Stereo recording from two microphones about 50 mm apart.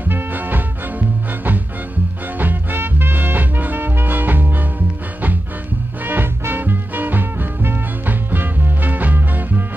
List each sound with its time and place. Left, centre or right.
0.0 s music: right
6.0 s music: right